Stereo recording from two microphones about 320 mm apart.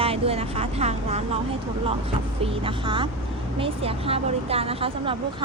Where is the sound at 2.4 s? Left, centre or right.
Centre.